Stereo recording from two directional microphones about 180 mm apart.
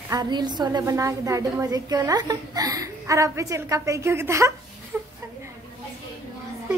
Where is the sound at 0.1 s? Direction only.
20° right (ahead or behind).